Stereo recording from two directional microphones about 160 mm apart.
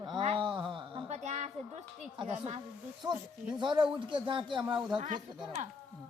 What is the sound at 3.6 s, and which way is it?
A woman's voice, 30° right (ahead or behind).